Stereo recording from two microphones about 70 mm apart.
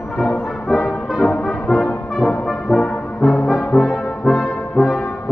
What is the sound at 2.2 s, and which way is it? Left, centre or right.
Brass instrument, centre.